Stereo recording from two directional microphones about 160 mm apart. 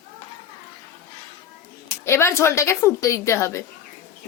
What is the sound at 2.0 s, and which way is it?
A woman's voice, 15° left (ahead or behind).